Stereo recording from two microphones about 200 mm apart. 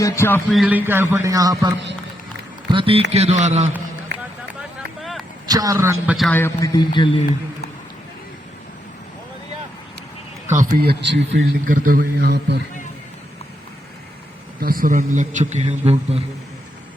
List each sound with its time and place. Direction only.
0.0 s a man's voice: 10° left (ahead or behind)
0.5 s a man's voice: 5° right (ahead or behind)
2.7 s a man's voice: 25° right (ahead or behind)
4.9 s vehicle: centre (ahead or behind)
5.5 s a man's voice: 20° right (ahead or behind)
6.1 s a man's voice: 5° left (ahead or behind); by 7.2 s 25° left (ahead or behind)
10.4 s a man's voice: 40° right (ahead or behind); by 12.6 s 55° right (ahead or behind)
14.6 s a man's voice: 45° right (ahead or behind)